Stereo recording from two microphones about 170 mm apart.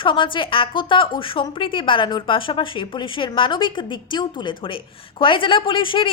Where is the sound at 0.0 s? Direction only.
30° left (ahead or behind).